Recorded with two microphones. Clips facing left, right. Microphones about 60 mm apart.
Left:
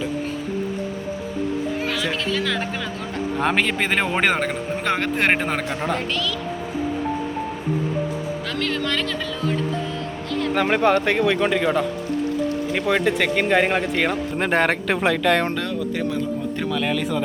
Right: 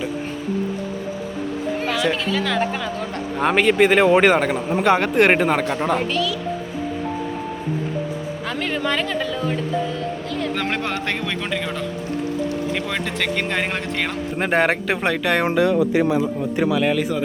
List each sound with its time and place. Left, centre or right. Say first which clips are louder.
1.9 s speech: right 3 dB; centre
8.4 s a sound: right 3 dB; centre
10.5 s speech: left 10 dB; centre
14.3 s a man's voice: right 3 dB; centre